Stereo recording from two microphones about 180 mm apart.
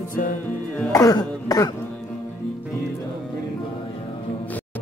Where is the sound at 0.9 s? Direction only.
20° left (ahead or behind).